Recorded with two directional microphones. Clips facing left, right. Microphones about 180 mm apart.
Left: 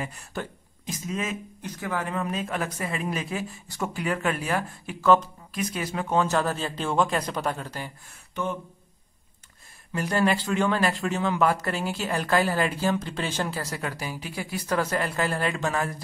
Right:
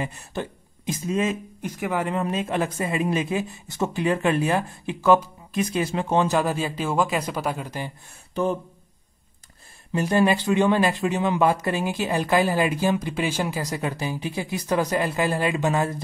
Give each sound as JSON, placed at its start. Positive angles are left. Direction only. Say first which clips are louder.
{"t": 0.0, "sound": "speech", "louder": "right 4 dB", "side_deg": -20}
{"t": 1.6, "sound": "speech", "louder": "right 4 dB", "side_deg": -15}
{"t": 2.1, "sound": "speech", "louder": "right 4 dB", "side_deg": -25}
{"t": 6.2, "sound": "speech", "louder": "right 3 dB", "side_deg": -15}
{"t": 9.9, "sound": "speech", "louder": "right 4 dB", "side_deg": -20}